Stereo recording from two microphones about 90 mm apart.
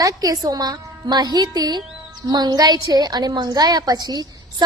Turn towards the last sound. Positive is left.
turn(degrees=-45)  # may be behind; listen again after turning